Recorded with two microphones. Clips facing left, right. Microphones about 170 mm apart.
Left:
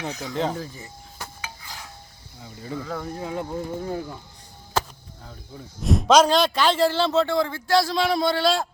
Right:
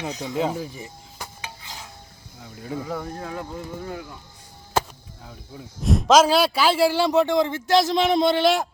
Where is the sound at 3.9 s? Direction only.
35° left (ahead or behind).